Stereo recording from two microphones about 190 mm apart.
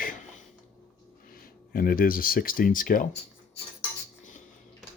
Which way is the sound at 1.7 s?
50° left (ahead or behind).